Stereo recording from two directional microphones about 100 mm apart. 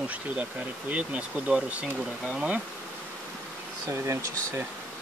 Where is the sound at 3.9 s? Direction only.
30° right (ahead or behind).